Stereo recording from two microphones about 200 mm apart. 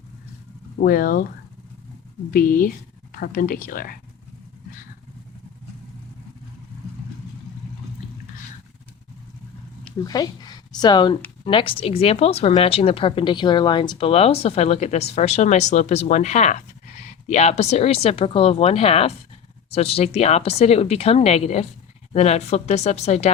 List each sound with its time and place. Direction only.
0.8 s speech: 45° left (ahead or behind)
2.3 s speech: 45° left (ahead or behind)
10.1 s a woman's voice: 20° left (ahead or behind)